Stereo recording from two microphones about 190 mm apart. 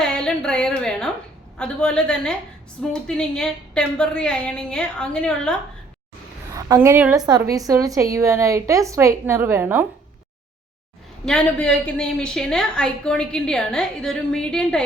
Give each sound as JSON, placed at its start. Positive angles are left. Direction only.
{"t": 0.0, "sound": "a woman's voice", "side_deg": 5}
{"t": 6.5, "sound": "a woman's voice", "side_deg": -15}
{"t": 7.3, "sound": "a woman's voice", "side_deg": -20}
{"t": 11.3, "sound": "a woman's voice", "side_deg": 5}